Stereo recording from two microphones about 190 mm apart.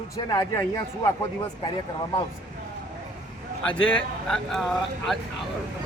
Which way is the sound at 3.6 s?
5° left (ahead or behind).